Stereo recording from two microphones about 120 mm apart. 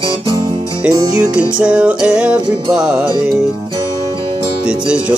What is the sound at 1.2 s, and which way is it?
Music, 10° right (ahead or behind).